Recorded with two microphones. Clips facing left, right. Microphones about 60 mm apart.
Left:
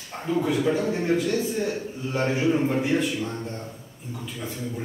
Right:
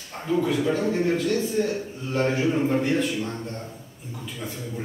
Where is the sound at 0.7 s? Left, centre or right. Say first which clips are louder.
Even; centre.